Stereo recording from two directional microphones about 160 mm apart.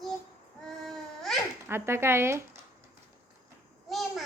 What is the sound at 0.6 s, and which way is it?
Baby cry, centre (ahead or behind).